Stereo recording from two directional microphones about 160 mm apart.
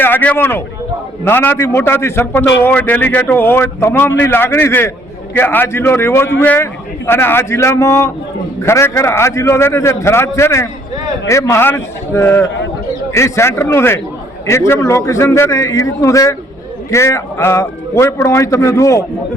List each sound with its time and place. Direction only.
0.0 s a man's voice: 10° left (ahead or behind)